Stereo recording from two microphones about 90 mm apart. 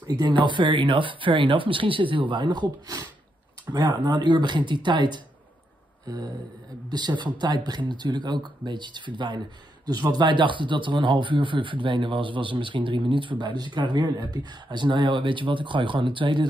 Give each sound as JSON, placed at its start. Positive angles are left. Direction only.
{"t": 0.1, "sound": "speech", "side_deg": -50}
{"t": 0.5, "sound": "speech", "side_deg": -65}
{"t": 3.7, "sound": "speech", "side_deg": -55}
{"t": 6.0, "sound": "speech", "side_deg": -45}
{"t": 9.8, "sound": "speech", "side_deg": -50}